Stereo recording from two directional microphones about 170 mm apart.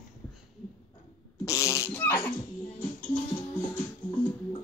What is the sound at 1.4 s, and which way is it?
Fart, 20° left (ahead or behind).